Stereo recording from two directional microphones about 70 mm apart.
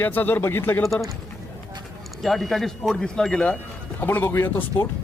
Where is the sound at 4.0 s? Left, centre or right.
Left.